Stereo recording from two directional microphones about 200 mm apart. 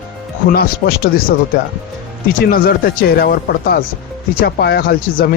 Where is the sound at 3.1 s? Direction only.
50° left (ahead or behind).